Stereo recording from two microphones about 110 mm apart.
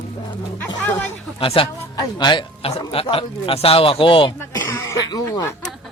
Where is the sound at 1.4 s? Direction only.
55° left (ahead or behind).